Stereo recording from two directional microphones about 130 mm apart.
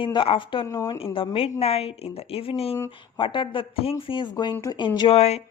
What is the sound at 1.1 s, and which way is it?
A woman's voice, 45° left (ahead or behind).